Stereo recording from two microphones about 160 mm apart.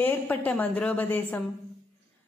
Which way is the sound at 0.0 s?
10° left (ahead or behind).